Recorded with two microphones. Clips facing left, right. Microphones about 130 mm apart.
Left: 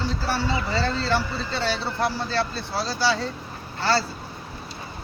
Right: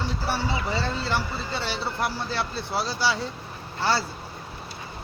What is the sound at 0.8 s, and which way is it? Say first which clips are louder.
Speech: left 3 dB; 15° right (ahead or behind).